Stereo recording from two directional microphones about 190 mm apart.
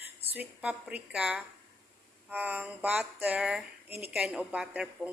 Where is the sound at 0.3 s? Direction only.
5° right (ahead or behind).